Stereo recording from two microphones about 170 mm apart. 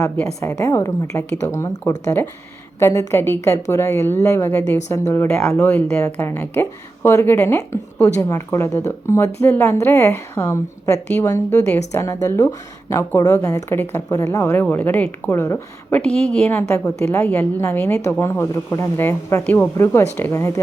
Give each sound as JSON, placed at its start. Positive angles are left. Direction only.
{"t": 0.0, "sound": "speech", "side_deg": 15}